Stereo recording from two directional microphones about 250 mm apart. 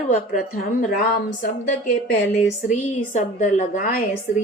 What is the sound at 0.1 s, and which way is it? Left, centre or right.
Speech, left.